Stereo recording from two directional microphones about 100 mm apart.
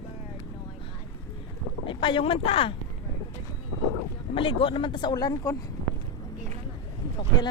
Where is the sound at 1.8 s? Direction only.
55° left (ahead or behind); by 2.7 s 75° left (ahead or behind).